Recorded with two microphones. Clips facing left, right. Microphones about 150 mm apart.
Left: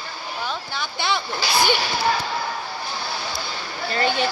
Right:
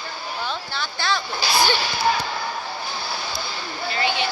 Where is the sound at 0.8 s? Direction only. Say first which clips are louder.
Left 1 dB; 20° left (ahead or behind).